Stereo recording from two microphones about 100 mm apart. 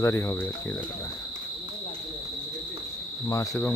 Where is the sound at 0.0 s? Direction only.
30° left (ahead or behind).